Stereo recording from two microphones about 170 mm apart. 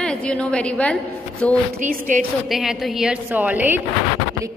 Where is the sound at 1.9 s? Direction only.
55° right (ahead or behind).